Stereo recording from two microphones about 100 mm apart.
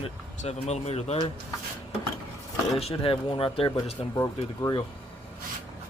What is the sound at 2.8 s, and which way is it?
Speech, 70° left (ahead or behind).